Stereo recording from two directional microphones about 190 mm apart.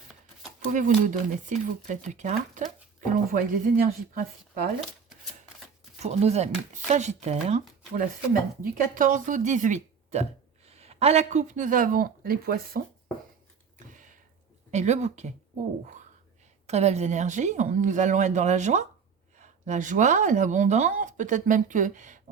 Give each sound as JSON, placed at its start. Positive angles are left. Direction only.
{"t": 0.7, "sound": "speech", "side_deg": -45}
{"t": 6.0, "sound": "speech", "side_deg": -35}
{"t": 13.7, "sound": "a sound", "side_deg": -40}
{"t": 14.7, "sound": "speech", "side_deg": -35}
{"t": 16.6, "sound": "speech", "side_deg": -35}